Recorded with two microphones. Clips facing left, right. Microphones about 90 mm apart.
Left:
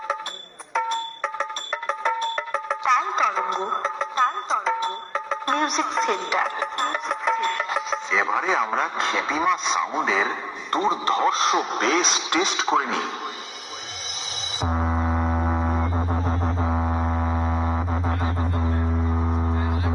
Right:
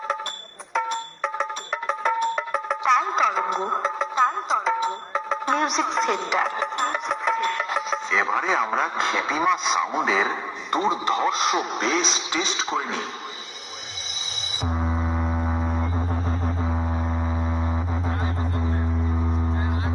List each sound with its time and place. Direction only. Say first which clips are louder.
0.1 s music: even; centre (ahead or behind)
12.7 s speech: left 5 dB; centre (ahead or behind)
14.7 s music: left 2 dB; 5° left (ahead or behind)
16.4 s a sound: left 3 dB; 5° left (ahead or behind)
19.1 s a sound: left 1 dB; 15° left (ahead or behind)
19.5 s music: left 1 dB; 25° right (ahead or behind)